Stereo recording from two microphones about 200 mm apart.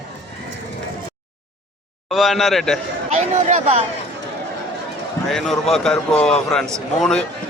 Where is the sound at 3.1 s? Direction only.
35° right (ahead or behind).